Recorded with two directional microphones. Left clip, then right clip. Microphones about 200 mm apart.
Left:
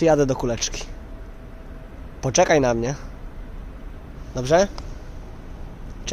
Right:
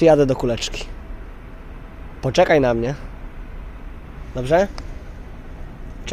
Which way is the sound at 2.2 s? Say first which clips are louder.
Right 2 dB; centre (ahead or behind).